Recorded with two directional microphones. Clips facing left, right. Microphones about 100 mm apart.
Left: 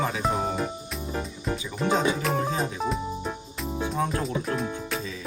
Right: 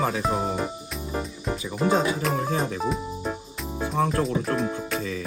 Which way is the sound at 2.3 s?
Centre (ahead or behind).